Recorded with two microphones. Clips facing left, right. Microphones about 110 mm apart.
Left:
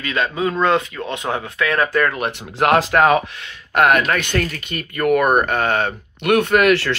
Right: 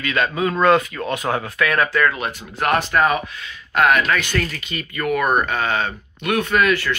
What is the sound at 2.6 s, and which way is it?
Speech, 90° left.